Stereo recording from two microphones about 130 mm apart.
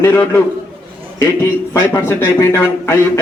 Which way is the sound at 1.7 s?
20° left (ahead or behind).